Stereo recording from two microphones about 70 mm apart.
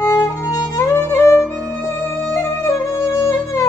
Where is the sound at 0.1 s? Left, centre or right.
Left.